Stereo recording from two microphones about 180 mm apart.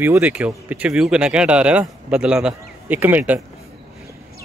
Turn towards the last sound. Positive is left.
turn(degrees=-10)  # may be behind; listen again after turning